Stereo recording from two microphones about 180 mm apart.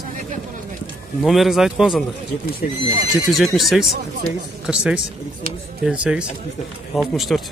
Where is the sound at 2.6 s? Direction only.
45° left (ahead or behind).